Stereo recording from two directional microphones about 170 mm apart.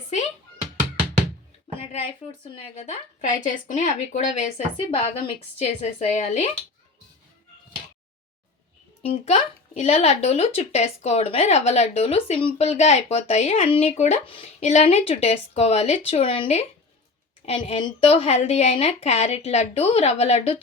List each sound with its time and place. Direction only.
1.9 s speech: 35° left (ahead or behind)
9.0 s speech: 40° left (ahead or behind)